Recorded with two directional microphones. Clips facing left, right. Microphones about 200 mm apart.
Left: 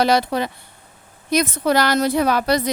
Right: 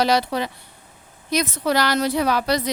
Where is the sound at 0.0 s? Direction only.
50° left (ahead or behind).